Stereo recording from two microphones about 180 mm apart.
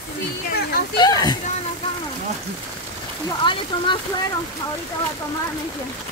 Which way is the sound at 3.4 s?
25° left (ahead or behind).